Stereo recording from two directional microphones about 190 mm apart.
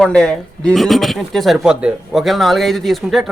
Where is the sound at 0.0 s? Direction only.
5° left (ahead or behind).